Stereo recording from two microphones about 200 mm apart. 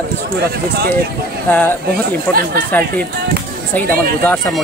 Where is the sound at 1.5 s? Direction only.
10° left (ahead or behind).